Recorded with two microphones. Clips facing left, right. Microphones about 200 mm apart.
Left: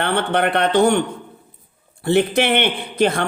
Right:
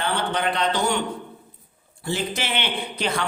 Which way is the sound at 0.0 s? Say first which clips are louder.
Left 6 dB; 60° left (ahead or behind).